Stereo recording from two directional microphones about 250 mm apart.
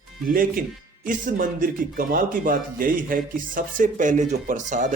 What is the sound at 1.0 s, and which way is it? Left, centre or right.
Speech, right.